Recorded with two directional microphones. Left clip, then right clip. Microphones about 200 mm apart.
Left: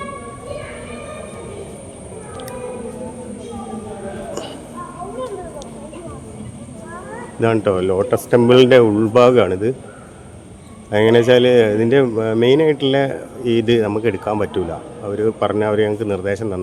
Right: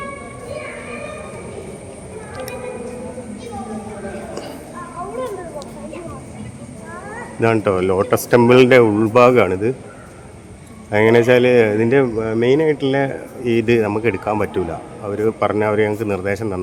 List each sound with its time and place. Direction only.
7.3 s speech: centre (ahead or behind)
10.9 s speech: centre (ahead or behind)